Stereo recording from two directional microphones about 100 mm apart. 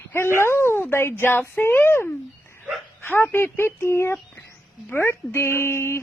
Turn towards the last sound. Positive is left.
turn(degrees=25)  # may be behind; listen again after turning